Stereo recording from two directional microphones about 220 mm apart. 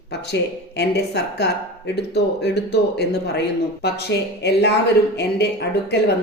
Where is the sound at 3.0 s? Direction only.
50° left (ahead or behind).